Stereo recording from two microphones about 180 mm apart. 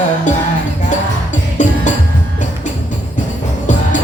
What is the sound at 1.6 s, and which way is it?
Music, 45° left (ahead or behind).